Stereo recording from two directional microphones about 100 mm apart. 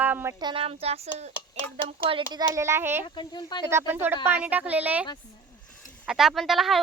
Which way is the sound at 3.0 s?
50° left (ahead or behind).